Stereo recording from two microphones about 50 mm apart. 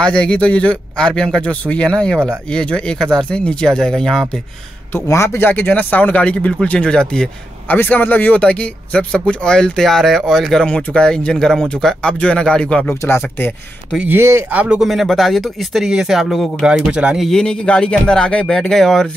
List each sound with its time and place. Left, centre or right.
0.0 s speech: centre
5.0 s a man's voice: left
5.4 s speech: left; by 7.2 s centre
7.7 s speech: left; by 10.6 s centre
10.6 s speech: centre
12.0 s speech: left
14.8 s speech: centre
16.9 s speech: centre
17.3 s speech: centre